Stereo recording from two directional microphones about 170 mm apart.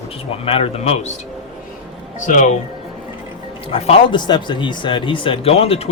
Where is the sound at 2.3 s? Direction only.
45° left (ahead or behind).